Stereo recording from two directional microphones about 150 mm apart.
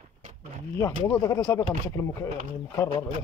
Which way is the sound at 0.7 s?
20° left (ahead or behind).